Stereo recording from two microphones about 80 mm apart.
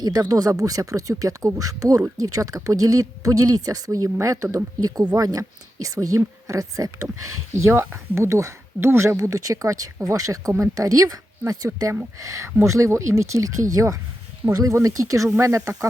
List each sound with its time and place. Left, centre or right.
0.0 s a woman's voice: right
9.1 s a woman's voice: right